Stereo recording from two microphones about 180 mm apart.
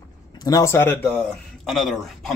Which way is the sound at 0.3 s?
20° left (ahead or behind).